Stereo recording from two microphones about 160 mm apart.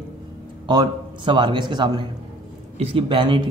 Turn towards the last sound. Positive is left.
turn(degrees=-30)  # may be behind; listen again after turning